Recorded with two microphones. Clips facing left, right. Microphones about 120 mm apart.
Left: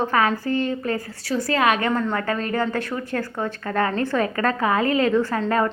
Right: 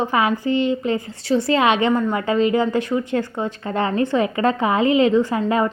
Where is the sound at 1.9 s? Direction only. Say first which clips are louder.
Right 4 dB; 10° right (ahead or behind).